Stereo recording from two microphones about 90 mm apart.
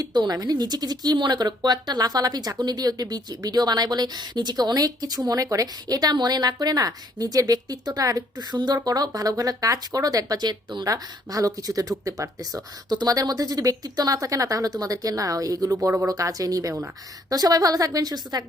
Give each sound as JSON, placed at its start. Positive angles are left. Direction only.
{"t": 0.0, "sound": "speech", "side_deg": -50}
{"t": 10.8, "sound": "speech", "side_deg": -40}